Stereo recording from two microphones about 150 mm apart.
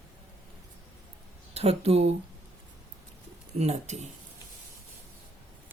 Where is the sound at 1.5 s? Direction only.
45° right (ahead or behind).